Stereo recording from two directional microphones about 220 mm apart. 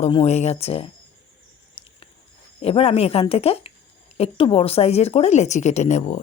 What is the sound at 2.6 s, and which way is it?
Speech, 25° left (ahead or behind).